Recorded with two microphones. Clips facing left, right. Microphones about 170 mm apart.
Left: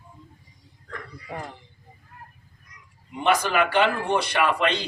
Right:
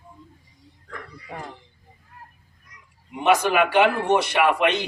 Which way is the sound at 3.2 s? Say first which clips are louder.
Right 3 dB; 15° right (ahead or behind).